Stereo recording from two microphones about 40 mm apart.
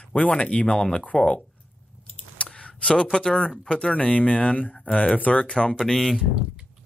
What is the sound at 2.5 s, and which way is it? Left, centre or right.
Speech, left.